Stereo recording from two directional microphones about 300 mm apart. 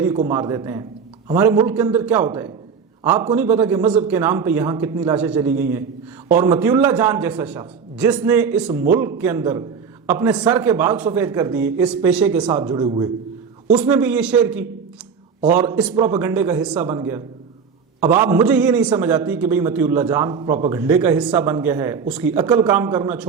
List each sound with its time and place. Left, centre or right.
0.0 s a man's voice: centre